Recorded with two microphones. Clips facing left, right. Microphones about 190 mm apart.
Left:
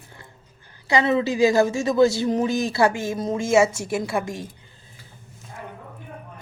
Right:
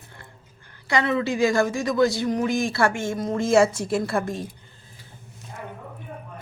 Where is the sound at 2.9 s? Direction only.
25° right (ahead or behind).